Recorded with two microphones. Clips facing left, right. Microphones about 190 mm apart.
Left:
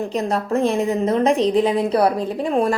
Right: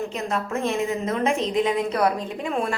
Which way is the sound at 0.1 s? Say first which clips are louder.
Left 6 dB; 35° left (ahead or behind).